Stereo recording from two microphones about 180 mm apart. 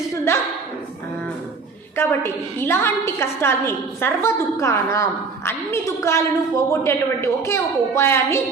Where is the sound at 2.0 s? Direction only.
15° left (ahead or behind).